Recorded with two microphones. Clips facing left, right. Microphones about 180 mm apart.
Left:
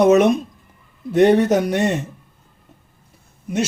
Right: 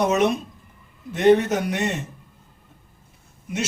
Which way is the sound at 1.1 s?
35° left (ahead or behind).